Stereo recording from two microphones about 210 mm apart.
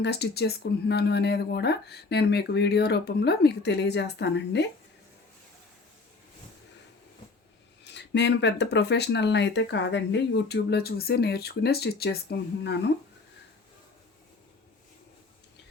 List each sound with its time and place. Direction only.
0.0 s speech: 50° left (ahead or behind)
7.9 s speech: 55° left (ahead or behind)